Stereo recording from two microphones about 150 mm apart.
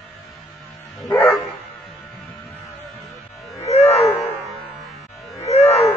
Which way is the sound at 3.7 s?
45° left (ahead or behind).